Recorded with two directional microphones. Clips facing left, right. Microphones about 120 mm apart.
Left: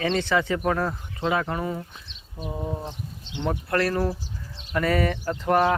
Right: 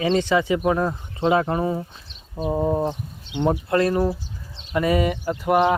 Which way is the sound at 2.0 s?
40° right (ahead or behind).